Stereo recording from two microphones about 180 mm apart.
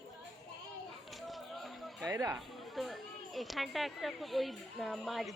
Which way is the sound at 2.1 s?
20° right (ahead or behind).